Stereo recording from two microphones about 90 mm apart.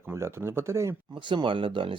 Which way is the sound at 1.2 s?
65° right (ahead or behind).